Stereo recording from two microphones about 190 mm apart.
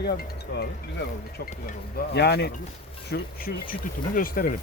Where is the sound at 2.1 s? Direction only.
60° left (ahead or behind).